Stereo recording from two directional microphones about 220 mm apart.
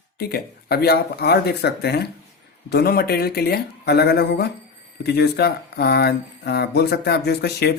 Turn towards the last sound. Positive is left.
turn(degrees=50)  # may be behind; listen again after turning